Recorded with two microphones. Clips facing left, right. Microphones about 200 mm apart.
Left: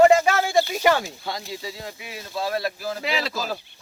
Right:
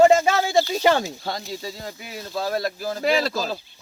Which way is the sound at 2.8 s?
45° right (ahead or behind).